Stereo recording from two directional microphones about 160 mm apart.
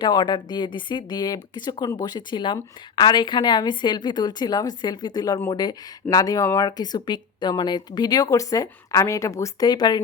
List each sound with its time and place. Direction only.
0.0 s speech: 30° left (ahead or behind)